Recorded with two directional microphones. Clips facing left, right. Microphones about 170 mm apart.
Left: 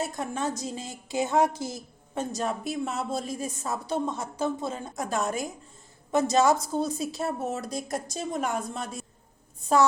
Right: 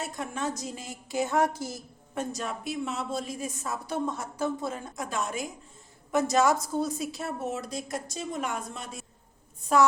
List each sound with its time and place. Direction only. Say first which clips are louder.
0.0 s a woman's voice: left 3 dB; 35° left (ahead or behind)
0.6 s a woman's voice: left 3 dB; 25° left (ahead or behind)
2.4 s a woman's voice: left 3 dB; 40° left (ahead or behind); by 4.9 s 25° left (ahead or behind)
4.9 s a woman's voice: left 5 dB; 40° left (ahead or behind)
6.1 s a woman's voice: left 2 dB; 25° left (ahead or behind)